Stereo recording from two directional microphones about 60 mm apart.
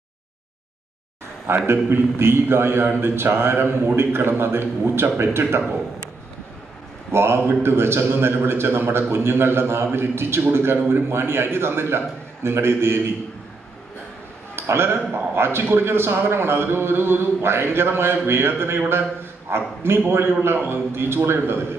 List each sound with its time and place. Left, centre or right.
1.7 s a man's voice: right
7.1 s a man's voice: right
14.5 s a man's voice: right